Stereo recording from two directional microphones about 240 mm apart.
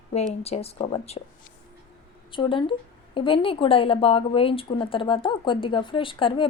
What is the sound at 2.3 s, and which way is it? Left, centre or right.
A woman's voice, centre.